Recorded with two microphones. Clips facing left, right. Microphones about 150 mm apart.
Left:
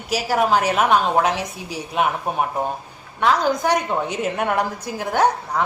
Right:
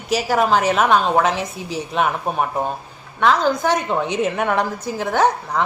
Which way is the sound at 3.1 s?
10° left (ahead or behind).